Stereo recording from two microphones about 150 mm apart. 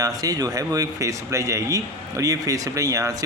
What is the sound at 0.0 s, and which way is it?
Speech, 25° right (ahead or behind).